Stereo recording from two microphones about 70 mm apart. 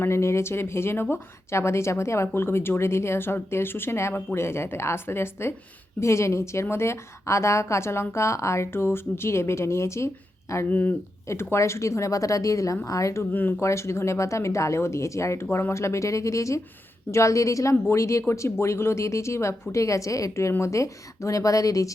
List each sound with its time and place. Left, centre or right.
0.0 s speech: left
10.7 s speech: left
11.5 s speech: left
13.3 s speech: left
13.6 s speech: left
15.4 s speech: left
15.7 s speech: left